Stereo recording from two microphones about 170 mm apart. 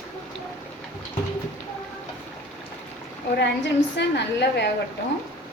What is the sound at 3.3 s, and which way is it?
A woman's voice, 90° left.